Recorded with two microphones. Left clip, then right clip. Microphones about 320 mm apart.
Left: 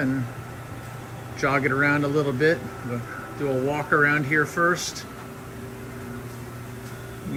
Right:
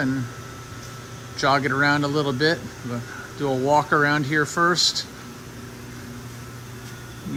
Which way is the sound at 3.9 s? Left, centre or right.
Centre.